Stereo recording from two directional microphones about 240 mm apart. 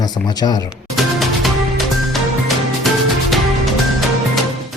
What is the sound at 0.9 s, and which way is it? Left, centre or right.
Music, centre.